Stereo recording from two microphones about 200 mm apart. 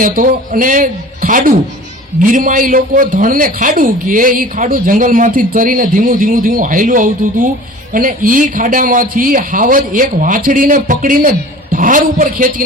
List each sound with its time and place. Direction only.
0.0 s a man's voice: 40° right (ahead or behind)